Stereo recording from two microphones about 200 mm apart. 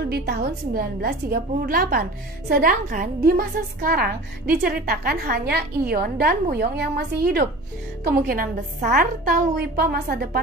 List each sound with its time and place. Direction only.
0.1 s a woman's voice: 50° right (ahead or behind)